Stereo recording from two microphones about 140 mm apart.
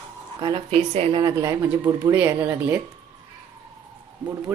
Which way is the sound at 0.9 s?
50° right (ahead or behind).